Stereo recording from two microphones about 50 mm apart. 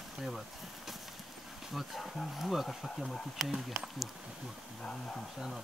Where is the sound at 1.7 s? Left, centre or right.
Centre.